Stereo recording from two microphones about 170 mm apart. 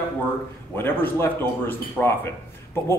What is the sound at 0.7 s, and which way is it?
Speech, 10° left (ahead or behind).